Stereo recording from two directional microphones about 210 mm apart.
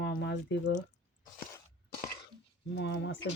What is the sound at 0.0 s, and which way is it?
Drip, 55° left (ahead or behind).